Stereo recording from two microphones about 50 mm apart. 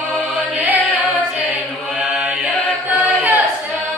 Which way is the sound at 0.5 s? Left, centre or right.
Right.